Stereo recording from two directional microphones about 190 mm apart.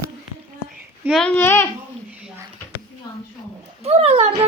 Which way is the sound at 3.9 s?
30° right (ahead or behind).